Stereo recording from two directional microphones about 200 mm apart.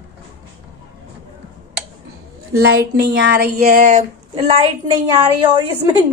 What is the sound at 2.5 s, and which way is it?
Speech, 50° right (ahead or behind).